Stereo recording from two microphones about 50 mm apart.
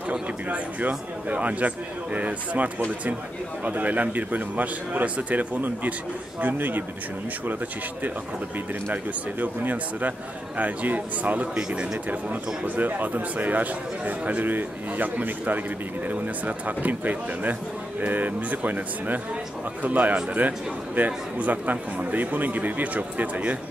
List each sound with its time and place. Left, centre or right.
0.1 s a man's voice: right
8.9 s a man's voice: right
11.5 s a man's voice: centre